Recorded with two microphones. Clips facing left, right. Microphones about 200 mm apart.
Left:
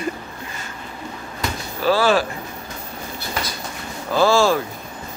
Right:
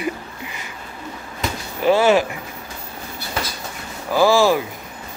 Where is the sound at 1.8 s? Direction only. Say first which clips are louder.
Right 2 dB; 20° right (ahead or behind).